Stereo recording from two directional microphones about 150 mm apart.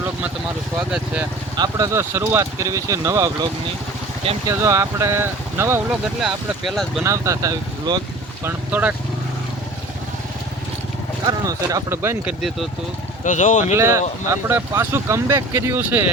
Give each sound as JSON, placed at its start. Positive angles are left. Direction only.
{"t": 0.9, "sound": "speech", "side_deg": -5}
{"t": 1.5, "sound": "speech", "side_deg": -25}
{"t": 4.4, "sound": "speech", "side_deg": -20}
{"t": 6.1, "sound": "speech", "side_deg": 0}
{"t": 7.0, "sound": "speech", "side_deg": -20}
{"t": 8.4, "sound": "speech", "side_deg": -10}
{"t": 11.3, "sound": "speech", "side_deg": -25}
{"t": 12.4, "sound": "speech", "side_deg": 0}
{"t": 13.2, "sound": "speech", "side_deg": 55}
{"t": 13.7, "sound": "speech", "side_deg": -20}